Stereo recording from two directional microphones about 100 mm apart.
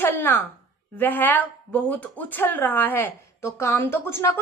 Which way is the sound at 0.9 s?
15° left (ahead or behind).